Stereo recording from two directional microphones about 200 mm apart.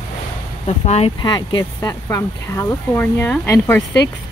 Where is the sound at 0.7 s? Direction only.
30° left (ahead or behind); by 3.8 s 10° left (ahead or behind).